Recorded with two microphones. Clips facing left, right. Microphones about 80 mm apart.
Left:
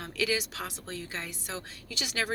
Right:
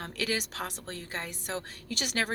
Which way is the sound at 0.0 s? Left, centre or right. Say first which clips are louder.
Left 2 dB; right.